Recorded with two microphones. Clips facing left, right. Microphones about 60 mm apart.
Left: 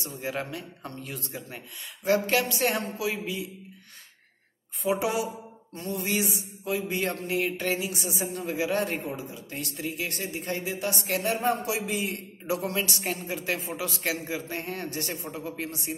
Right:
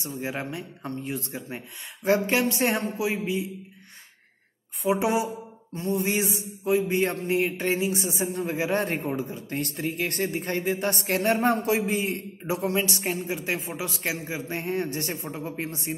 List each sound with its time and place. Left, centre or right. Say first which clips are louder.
0.2 s a woman's voice: even; right
4.8 s a woman's voice: right 3 dB; right